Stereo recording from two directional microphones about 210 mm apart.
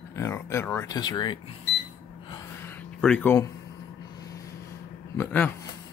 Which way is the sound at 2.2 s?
15° left (ahead or behind).